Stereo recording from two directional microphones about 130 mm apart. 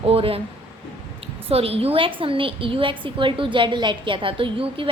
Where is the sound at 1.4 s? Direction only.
50° right (ahead or behind).